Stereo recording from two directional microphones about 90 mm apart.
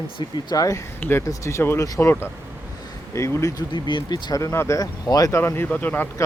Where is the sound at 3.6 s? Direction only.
60° left (ahead or behind).